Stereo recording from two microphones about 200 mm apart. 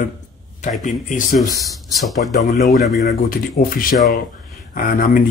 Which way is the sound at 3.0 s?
45° left (ahead or behind).